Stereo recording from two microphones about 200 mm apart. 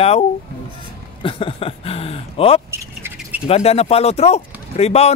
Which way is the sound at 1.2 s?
25° left (ahead or behind).